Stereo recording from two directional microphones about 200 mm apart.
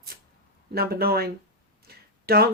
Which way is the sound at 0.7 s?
50° right (ahead or behind).